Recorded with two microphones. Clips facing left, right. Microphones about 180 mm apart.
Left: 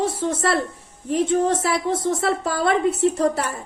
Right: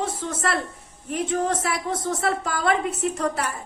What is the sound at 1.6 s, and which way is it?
A woman's voice, 30° left (ahead or behind).